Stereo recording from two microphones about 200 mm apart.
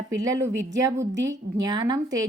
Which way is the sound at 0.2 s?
15° right (ahead or behind).